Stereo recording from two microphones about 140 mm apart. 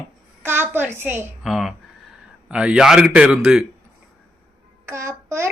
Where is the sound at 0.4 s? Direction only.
15° right (ahead or behind).